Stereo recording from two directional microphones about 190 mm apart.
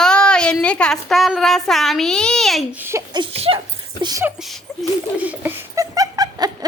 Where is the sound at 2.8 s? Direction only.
20° right (ahead or behind).